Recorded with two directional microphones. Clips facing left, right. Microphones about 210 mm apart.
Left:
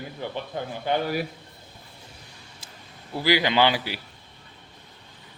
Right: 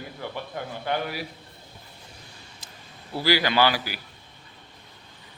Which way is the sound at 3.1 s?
20° left (ahead or behind).